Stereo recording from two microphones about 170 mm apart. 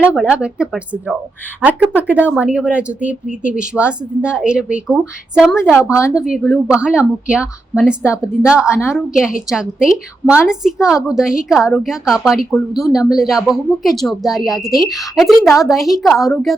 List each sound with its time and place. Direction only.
0.0 s speech: 5° right (ahead or behind)